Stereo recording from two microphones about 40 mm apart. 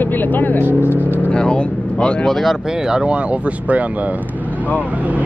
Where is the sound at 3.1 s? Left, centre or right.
Right.